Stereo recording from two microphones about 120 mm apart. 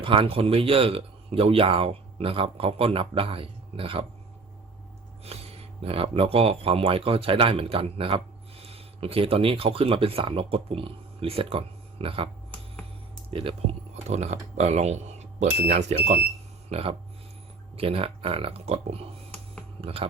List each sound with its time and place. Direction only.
0.0 s speech: 45° right (ahead or behind)
5.2 s speech: 60° right (ahead or behind)
13.3 s speech: 50° right (ahead or behind); by 16.1 s 75° right (ahead or behind)
16.6 s speech: 55° right (ahead or behind)